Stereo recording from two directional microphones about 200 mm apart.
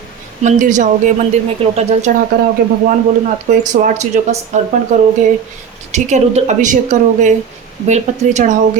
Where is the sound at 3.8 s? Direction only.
35° right (ahead or behind).